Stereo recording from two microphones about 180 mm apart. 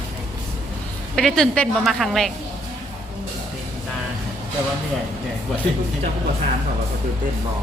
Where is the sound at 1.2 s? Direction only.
Centre (ahead or behind).